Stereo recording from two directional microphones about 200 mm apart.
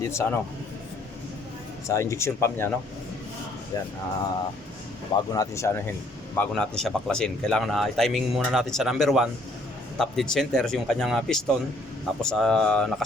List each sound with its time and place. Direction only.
0.0 s speech: 15° left (ahead or behind)
1.9 s speech: 15° left (ahead or behind)
5.1 s speech: 15° left (ahead or behind)